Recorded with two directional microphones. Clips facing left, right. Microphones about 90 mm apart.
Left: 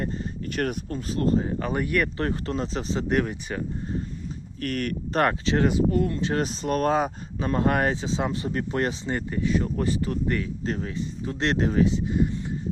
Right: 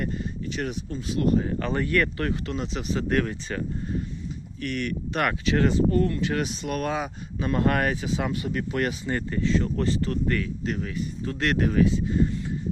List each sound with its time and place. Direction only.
0.4 s speech: 50° left (ahead or behind)
1.1 s speech: 30° left (ahead or behind)
1.5 s speech: 15° left (ahead or behind)
2.1 s speech: 35° left (ahead or behind)
2.9 s speech: 20° left (ahead or behind)
4.6 s speech: 45° left (ahead or behind)
5.6 s speech: 10° left (ahead or behind)
6.1 s speech: 25° left (ahead or behind)
6.4 s speech: 40° left (ahead or behind); by 10.5 s 20° left (ahead or behind)
10.7 s speech: 35° left (ahead or behind)